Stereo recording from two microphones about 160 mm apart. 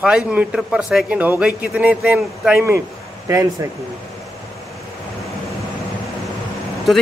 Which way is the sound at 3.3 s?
20° right (ahead or behind).